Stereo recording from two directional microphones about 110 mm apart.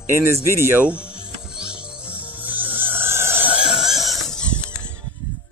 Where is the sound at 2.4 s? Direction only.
15° right (ahead or behind).